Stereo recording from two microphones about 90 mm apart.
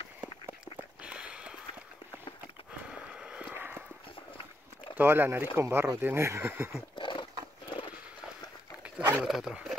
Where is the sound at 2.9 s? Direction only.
10° right (ahead or behind).